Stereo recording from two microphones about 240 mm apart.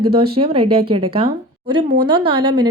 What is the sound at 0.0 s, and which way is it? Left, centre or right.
Speech, right.